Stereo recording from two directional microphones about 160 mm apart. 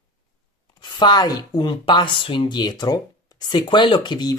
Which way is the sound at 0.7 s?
30° left (ahead or behind).